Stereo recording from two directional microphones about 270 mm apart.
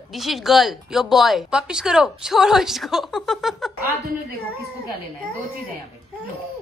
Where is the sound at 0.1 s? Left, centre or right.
Centre.